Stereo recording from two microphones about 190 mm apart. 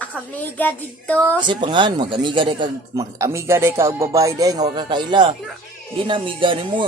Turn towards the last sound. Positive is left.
turn(degrees=-25)  # may be behind; listen again after turning